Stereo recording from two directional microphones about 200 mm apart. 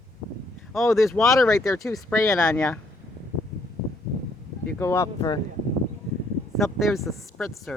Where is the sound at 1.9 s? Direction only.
Centre (ahead or behind).